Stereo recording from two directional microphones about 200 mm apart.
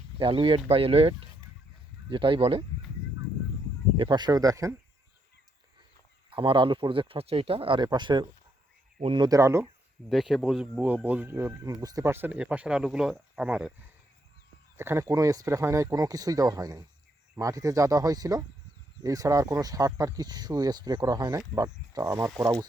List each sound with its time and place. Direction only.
0.2 s speech: 25° right (ahead or behind)
3.9 s speech: 25° right (ahead or behind)
6.3 s speech: 25° right (ahead or behind)
10.1 s speech: centre (ahead or behind)
14.8 s speech: 15° right (ahead or behind)